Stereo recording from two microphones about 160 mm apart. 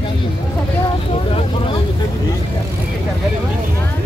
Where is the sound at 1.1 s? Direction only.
35° left (ahead or behind).